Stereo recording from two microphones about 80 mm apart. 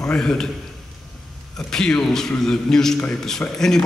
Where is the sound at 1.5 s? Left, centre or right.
Centre.